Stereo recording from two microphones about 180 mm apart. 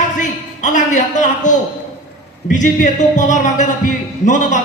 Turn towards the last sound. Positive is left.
turn(degrees=45)  # may be behind; listen again after turning